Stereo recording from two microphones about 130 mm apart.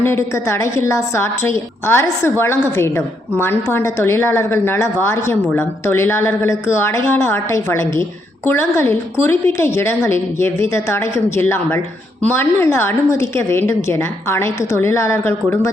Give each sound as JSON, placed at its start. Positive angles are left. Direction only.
{"t": 0.0, "sound": "a woman's voice", "side_deg": 20}